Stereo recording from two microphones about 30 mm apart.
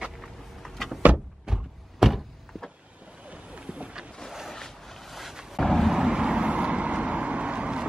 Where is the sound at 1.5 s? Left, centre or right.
Right.